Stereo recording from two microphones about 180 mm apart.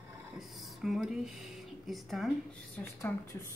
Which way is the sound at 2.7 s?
15° left (ahead or behind).